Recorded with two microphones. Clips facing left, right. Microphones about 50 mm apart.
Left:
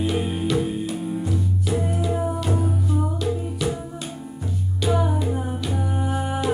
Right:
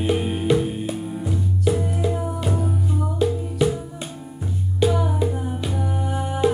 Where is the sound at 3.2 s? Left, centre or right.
Right.